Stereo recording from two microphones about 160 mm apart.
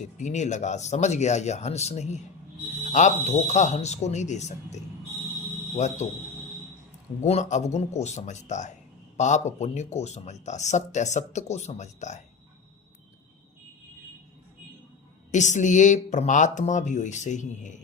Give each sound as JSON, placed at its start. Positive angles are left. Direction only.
{"t": 0.0, "sound": "speech", "side_deg": 50}
{"t": 7.2, "sound": "speech", "side_deg": 45}
{"t": 15.3, "sound": "speech", "side_deg": 50}